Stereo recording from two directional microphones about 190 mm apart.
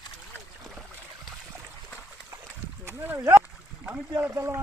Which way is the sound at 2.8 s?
10° right (ahead or behind).